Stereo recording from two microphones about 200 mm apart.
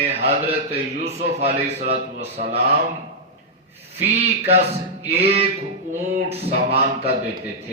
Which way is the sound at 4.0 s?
30° right (ahead or behind).